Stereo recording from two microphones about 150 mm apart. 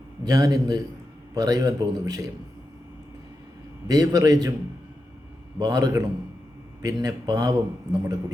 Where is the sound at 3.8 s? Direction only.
25° right (ahead or behind).